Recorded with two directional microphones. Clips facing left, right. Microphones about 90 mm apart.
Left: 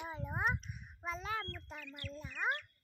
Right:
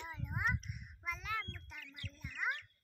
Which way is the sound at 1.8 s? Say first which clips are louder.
Left 5 dB; 50° left (ahead or behind).